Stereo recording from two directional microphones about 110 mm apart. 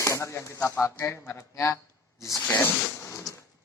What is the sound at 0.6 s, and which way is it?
Speech, 20° left (ahead or behind).